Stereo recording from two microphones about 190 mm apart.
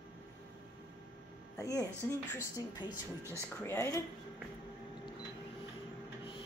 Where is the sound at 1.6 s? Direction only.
20° left (ahead or behind).